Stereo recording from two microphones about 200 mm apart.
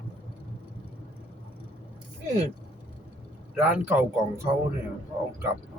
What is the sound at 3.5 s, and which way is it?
Speech, 5° right (ahead or behind).